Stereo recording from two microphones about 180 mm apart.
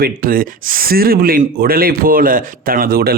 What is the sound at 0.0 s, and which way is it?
Speech, 50° right (ahead or behind).